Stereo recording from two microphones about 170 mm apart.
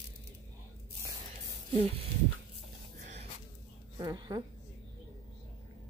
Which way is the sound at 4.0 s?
25° right (ahead or behind).